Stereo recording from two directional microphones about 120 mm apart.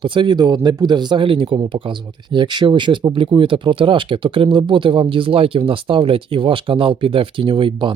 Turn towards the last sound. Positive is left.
turn(degrees=-45)  # may be behind; listen again after turning